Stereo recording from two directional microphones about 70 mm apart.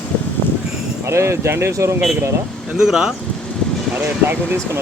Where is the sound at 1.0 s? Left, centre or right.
Right.